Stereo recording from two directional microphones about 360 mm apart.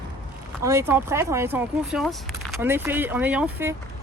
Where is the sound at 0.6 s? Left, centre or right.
Centre.